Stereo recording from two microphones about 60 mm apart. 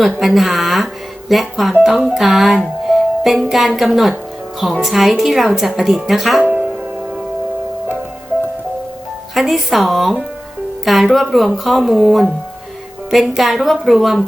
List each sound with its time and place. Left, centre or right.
0.0 s speech: centre
6.4 s music: right
9.3 s speech: centre